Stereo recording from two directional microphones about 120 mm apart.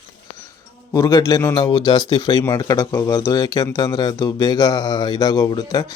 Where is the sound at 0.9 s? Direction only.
30° left (ahead or behind).